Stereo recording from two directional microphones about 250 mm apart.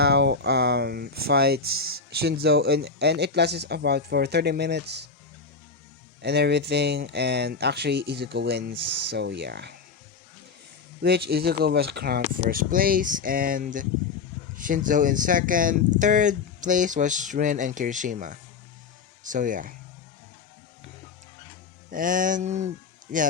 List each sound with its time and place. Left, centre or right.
0.0 s speech: right
1.6 s speech: right
2.0 s speech: right
6.2 s speech: right
11.3 s speech: right
21.8 s speech: right